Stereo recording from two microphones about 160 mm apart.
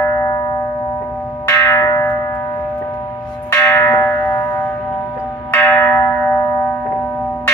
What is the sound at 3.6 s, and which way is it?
Church bell, 15° left (ahead or behind).